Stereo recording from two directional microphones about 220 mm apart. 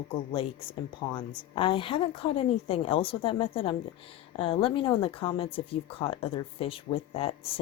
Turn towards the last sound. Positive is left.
turn(degrees=25)  # may be behind; listen again after turning